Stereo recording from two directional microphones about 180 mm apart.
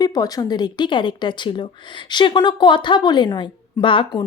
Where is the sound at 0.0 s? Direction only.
20° left (ahead or behind).